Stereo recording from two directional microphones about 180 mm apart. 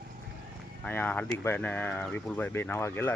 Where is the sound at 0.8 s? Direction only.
10° left (ahead or behind).